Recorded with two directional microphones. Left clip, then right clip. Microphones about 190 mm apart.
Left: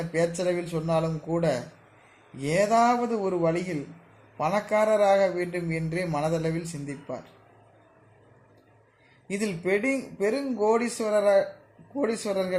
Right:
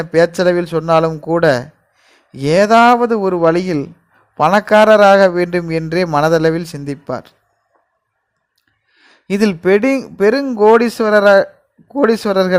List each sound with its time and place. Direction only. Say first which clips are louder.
0.0 s a man's voice: right 14 dB; 40° right (ahead or behind)
9.2 s a man's voice: right 15 dB; 40° right (ahead or behind)